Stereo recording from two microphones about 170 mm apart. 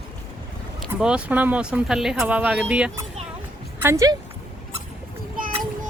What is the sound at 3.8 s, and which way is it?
Speech, 15° right (ahead or behind).